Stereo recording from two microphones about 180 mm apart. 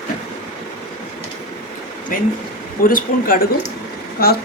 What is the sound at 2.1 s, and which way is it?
A man's voice, 50° left (ahead or behind).